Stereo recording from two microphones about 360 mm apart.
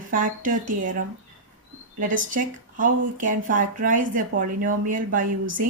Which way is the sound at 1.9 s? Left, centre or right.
Right.